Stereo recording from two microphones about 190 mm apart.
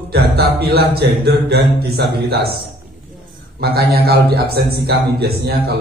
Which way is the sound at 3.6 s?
55° right (ahead or behind).